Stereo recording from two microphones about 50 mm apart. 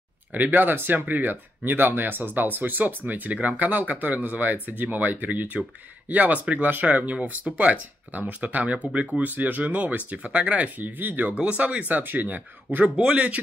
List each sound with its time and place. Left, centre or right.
0.3 s speech: right
11.3 s speech: right
12.0 s speech: right
12.9 s speech: right